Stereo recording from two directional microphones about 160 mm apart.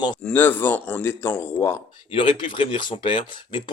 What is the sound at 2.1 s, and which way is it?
Speech, 30° left (ahead or behind).